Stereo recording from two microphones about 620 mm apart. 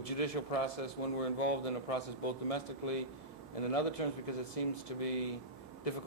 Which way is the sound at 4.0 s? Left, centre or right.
Left.